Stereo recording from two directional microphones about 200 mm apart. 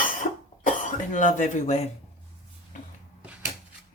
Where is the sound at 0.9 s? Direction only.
40° left (ahead or behind).